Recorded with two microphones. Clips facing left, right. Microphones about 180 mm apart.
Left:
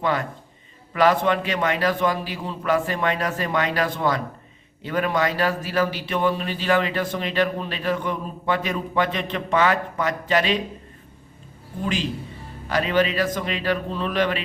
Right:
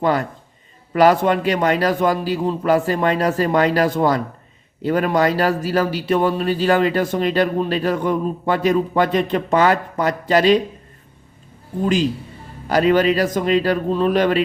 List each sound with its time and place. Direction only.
0.0 s a man's voice: 40° right (ahead or behind)
12.6 s a man's voice: 40° right (ahead or behind)